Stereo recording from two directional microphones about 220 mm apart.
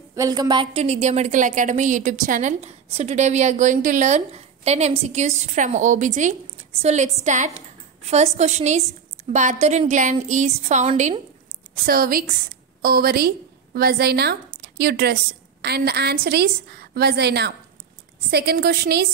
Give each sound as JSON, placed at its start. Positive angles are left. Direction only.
{"t": 0.1, "sound": "a woman's voice", "side_deg": -15}